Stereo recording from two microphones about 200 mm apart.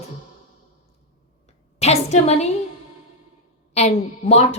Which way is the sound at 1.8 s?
35° left (ahead or behind).